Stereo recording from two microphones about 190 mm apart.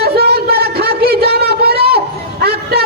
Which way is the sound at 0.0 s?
55° right (ahead or behind).